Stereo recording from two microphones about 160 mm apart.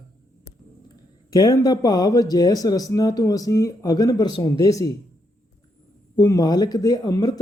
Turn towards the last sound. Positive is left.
turn(degrees=25)  # may be behind; listen again after turning